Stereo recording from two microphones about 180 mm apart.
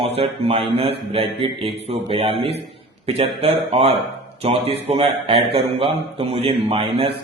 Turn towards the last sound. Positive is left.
turn(degrees=-30)  # may be behind; listen again after turning